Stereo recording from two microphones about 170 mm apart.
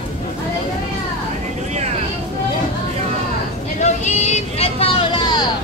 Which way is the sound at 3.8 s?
40° left (ahead or behind).